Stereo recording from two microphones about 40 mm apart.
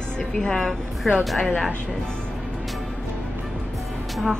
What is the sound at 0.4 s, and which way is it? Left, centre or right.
Speech, centre.